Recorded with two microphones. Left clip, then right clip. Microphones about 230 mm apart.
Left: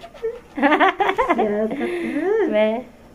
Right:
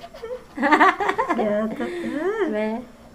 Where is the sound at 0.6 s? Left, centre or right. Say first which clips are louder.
Even; centre.